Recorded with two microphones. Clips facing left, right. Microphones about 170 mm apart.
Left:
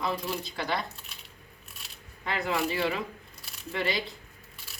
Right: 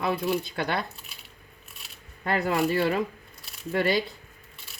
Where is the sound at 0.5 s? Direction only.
60° right (ahead or behind).